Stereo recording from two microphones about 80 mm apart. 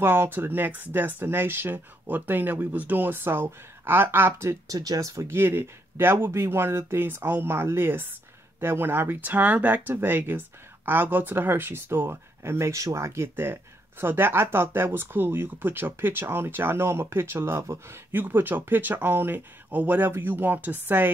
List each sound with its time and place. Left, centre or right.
0.0 s speech: right
4.7 s speech: right
5.4 s speech: right